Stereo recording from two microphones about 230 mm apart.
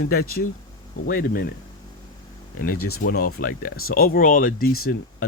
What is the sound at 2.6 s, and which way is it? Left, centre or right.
Speech, left.